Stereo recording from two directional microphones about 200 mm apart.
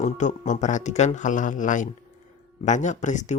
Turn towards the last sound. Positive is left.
turn(degrees=35)  # may be behind; listen again after turning